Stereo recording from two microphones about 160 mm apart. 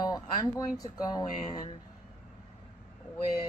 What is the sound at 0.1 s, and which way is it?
Speech, 25° left (ahead or behind).